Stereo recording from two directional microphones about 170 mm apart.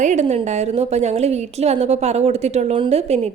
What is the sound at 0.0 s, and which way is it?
A woman's voice, 45° right (ahead or behind).